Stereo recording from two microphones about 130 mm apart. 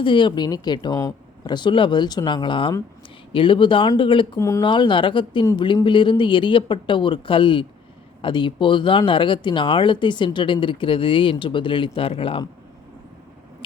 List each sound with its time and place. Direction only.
0.0 s speech: 40° left (ahead or behind)
4.4 s speech: 25° left (ahead or behind)
4.6 s speech: 40° left (ahead or behind)